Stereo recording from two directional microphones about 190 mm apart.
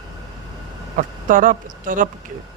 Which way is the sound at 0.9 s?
45° right (ahead or behind).